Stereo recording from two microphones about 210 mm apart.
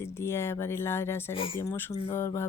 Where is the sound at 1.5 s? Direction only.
10° left (ahead or behind).